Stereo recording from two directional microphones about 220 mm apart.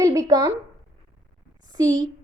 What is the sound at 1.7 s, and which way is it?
Speech, 15° right (ahead or behind).